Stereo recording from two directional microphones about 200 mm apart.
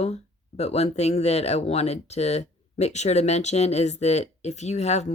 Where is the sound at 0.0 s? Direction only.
30° left (ahead or behind).